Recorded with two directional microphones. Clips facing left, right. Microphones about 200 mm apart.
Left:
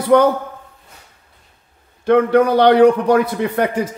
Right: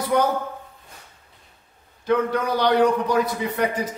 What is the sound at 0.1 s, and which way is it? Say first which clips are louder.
Speech: left 9 dB; 65° left (ahead or behind).